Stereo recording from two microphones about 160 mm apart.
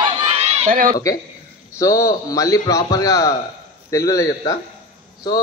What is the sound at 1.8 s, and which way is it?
A man's voice, 20° left (ahead or behind).